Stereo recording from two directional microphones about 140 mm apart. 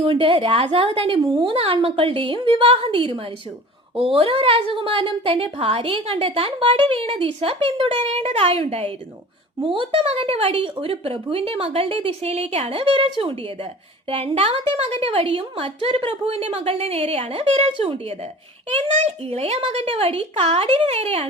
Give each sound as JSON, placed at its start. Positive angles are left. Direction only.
{"t": 0.0, "sound": "a woman's voice", "side_deg": -40}